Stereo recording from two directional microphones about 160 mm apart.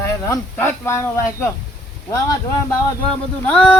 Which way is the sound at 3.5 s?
5° left (ahead or behind).